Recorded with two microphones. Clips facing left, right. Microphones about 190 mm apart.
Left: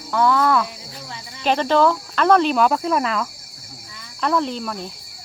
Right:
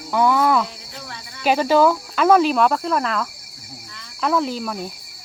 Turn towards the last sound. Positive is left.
turn(degrees=-5)  # may be behind; listen again after turning